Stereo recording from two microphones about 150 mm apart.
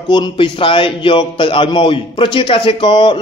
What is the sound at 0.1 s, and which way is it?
A man's voice, 35° left (ahead or behind).